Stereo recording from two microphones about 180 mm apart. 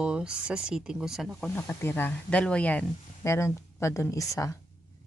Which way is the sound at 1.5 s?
15° left (ahead or behind).